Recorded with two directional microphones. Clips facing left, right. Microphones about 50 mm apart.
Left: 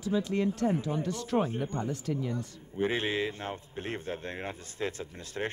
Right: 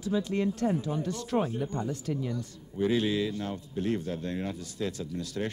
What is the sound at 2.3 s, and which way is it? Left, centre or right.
A man's voice, left.